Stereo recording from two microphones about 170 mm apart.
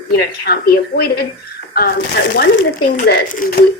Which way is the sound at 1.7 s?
65° left (ahead or behind).